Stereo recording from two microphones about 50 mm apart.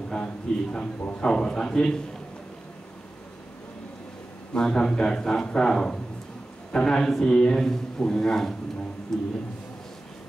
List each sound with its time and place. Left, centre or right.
0.1 s a man's voice: centre
4.6 s speech: centre